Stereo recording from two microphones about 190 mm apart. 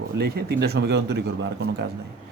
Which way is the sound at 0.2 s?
55° right (ahead or behind).